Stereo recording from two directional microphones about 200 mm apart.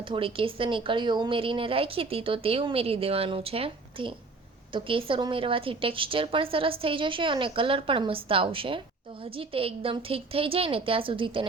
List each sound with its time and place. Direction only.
0.1 s a woman's voice: 25° right (ahead or behind)